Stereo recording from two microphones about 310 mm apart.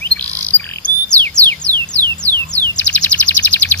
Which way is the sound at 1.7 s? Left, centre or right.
Centre.